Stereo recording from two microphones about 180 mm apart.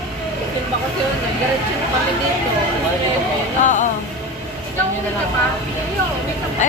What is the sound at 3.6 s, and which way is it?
Speech, 45° left (ahead or behind).